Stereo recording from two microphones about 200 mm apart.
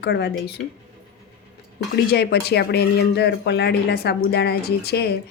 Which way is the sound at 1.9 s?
55° left (ahead or behind).